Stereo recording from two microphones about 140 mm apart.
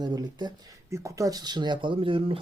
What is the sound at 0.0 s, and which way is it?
Speech, 30° right (ahead or behind).